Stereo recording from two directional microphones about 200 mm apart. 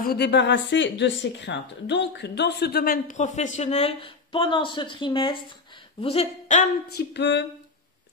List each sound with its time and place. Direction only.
0.0 s speech: 55° left (ahead or behind); by 6.6 s 30° left (ahead or behind)
6.9 s music: 55° left (ahead or behind)